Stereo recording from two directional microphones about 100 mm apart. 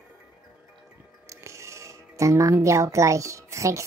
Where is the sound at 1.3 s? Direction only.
30° right (ahead or behind).